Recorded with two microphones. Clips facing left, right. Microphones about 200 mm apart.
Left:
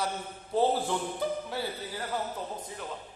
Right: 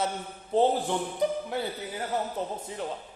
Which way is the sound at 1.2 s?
15° right (ahead or behind).